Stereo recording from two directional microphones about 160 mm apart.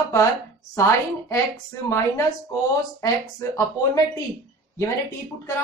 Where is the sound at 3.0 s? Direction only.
20° left (ahead or behind).